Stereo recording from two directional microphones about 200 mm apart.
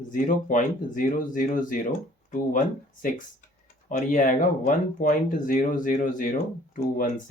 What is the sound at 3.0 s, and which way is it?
Speech, 40° left (ahead or behind).